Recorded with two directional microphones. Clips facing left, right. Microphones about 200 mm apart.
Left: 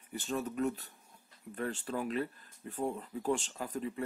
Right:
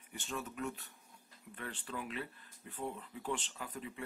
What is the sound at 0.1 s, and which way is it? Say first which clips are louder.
Speech: left 7 dB; 35° left (ahead or behind).